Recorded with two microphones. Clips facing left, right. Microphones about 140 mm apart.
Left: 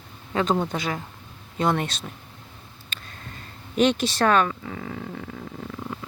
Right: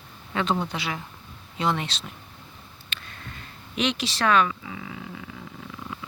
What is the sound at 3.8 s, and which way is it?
Speech, 50° left (ahead or behind).